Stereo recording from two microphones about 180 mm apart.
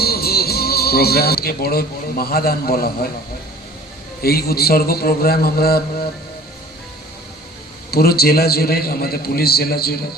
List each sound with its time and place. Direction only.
0.0 s speech: 60° left (ahead or behind)
4.2 s a man's voice: 60° left (ahead or behind)
7.9 s a man's voice: 60° left (ahead or behind)